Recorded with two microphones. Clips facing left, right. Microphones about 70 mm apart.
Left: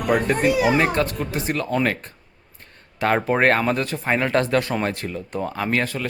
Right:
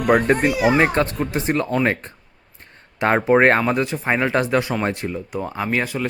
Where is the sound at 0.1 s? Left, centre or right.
Right.